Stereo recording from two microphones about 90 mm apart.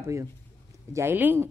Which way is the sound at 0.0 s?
35° right (ahead or behind).